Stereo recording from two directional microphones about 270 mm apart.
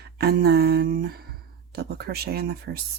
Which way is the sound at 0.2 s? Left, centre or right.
Right.